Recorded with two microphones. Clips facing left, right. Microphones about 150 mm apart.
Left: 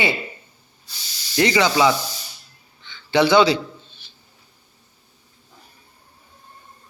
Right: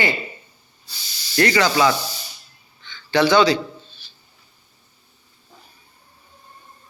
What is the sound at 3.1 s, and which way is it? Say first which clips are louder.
Speech: left 1 dB; 20° left (ahead or behind).